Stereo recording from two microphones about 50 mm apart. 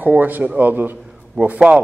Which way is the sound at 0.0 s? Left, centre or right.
Right.